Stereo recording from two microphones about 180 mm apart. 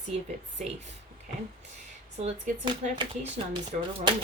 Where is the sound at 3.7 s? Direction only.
40° right (ahead or behind).